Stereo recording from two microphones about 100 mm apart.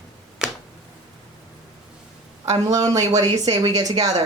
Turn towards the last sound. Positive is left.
turn(degrees=-35)  # may be behind; listen again after turning